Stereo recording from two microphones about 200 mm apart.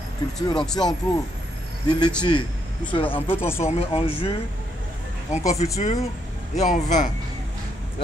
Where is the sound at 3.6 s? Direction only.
30° left (ahead or behind).